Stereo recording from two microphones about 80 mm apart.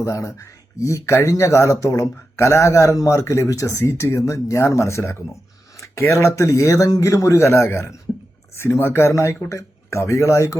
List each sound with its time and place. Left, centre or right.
0.0 s speech: left